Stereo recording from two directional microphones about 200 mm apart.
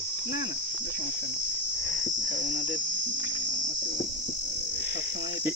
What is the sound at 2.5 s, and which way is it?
Cricket, 40° left (ahead or behind).